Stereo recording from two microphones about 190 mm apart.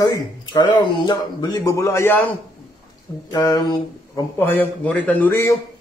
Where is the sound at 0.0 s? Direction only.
20° left (ahead or behind).